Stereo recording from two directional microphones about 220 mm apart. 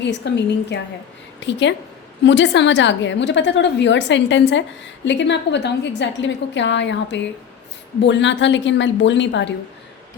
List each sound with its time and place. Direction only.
0.0 s a woman's voice: 50° left (ahead or behind)